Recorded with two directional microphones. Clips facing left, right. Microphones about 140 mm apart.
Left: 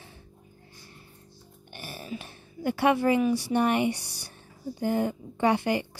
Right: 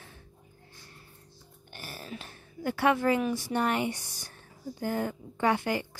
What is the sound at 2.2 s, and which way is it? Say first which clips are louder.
Speech: left 1 dB; 20° left (ahead or behind).